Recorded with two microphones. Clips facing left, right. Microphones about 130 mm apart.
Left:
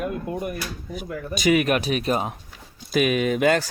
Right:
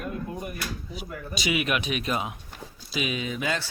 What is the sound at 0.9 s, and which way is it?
Speech, 50° left (ahead or behind).